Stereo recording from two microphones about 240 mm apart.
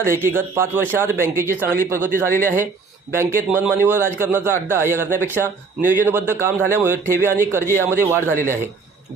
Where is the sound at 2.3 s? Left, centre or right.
Right.